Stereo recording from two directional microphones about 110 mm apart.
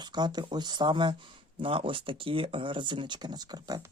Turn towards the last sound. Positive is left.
turn(degrees=-35)  # may be behind; listen again after turning